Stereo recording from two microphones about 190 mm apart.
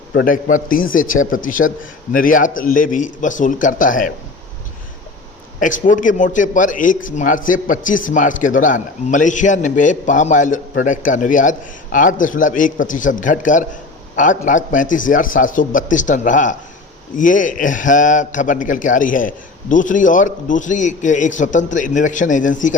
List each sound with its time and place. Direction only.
0.1 s a man's voice: 60° left (ahead or behind)
0.4 s a man's voice: 45° left (ahead or behind)
1.2 s speech: 90° left
2.1 s a man's voice: 45° left (ahead or behind)
5.5 s a man's voice: 45° left (ahead or behind)